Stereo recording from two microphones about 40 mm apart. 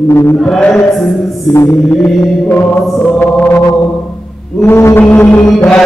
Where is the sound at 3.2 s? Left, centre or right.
Left.